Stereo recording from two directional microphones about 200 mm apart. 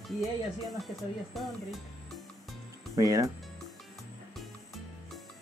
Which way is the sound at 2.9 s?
15° right (ahead or behind).